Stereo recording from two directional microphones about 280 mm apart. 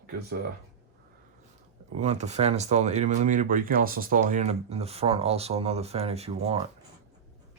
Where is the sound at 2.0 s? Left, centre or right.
Right.